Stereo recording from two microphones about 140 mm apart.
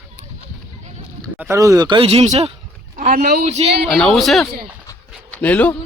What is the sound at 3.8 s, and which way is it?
Speech, 5° left (ahead or behind).